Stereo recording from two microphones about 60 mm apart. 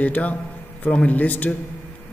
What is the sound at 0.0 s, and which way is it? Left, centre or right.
A man's voice, left.